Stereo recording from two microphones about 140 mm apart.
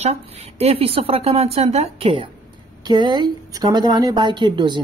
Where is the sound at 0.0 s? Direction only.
50° right (ahead or behind).